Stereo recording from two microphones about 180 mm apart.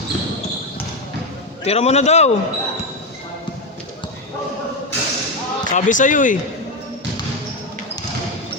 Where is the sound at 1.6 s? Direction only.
35° left (ahead or behind).